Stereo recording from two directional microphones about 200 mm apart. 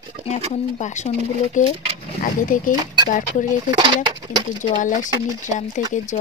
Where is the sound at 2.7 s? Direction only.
20° right (ahead or behind).